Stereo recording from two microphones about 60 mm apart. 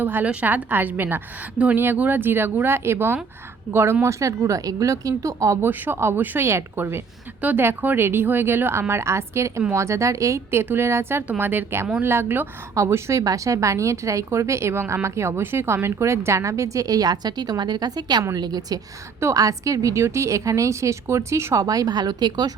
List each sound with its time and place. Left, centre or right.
0.0 s speech: right
4.0 s speech: right
5.6 s a woman's voice: right
12.7 s a woman's voice: right
13.2 s a woman's voice: right
19.2 s a woman's voice: right
21.6 s a woman's voice: right